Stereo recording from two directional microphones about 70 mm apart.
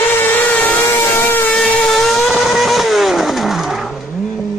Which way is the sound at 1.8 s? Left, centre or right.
Centre.